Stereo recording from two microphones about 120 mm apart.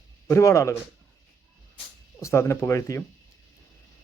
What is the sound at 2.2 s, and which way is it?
Speech, 25° left (ahead or behind).